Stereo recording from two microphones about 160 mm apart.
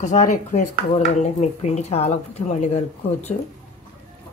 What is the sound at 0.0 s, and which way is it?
Speech, 50° left (ahead or behind).